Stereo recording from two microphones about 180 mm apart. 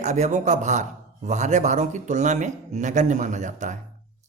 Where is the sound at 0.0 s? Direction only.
40° right (ahead or behind).